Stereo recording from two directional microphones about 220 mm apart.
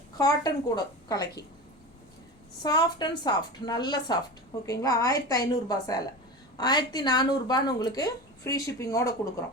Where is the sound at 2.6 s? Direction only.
20° left (ahead or behind).